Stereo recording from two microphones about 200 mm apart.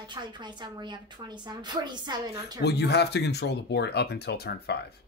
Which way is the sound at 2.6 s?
55° left (ahead or behind).